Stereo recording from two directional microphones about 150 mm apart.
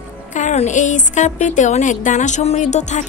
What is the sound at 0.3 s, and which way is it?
A woman's voice, 55° left (ahead or behind).